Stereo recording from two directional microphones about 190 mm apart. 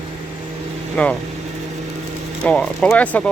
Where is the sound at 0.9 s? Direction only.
5° left (ahead or behind).